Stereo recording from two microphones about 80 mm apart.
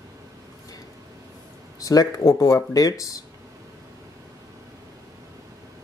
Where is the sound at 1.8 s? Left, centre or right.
Left.